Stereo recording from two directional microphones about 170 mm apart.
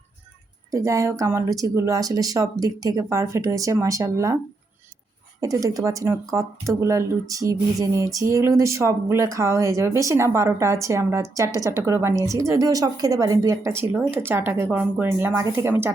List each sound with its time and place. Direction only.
0.7 s speech: 20° right (ahead or behind)
5.4 s speech: 20° right (ahead or behind)